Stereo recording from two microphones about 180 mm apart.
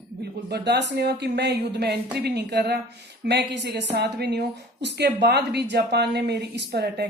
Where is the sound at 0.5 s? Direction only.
70° right (ahead or behind).